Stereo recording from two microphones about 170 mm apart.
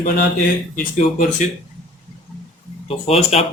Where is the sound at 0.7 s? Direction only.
45° left (ahead or behind).